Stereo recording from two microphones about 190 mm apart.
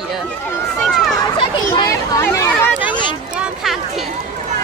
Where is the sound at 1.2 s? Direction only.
20° left (ahead or behind).